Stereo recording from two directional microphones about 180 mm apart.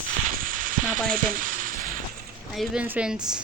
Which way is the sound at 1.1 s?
50° right (ahead or behind).